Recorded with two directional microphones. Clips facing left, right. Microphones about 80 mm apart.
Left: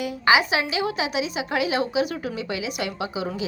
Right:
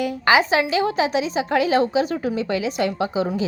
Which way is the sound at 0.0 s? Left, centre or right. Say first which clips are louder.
Right 2 dB; right.